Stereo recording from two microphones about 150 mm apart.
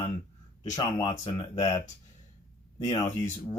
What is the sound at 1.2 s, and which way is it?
Speech, 25° left (ahead or behind).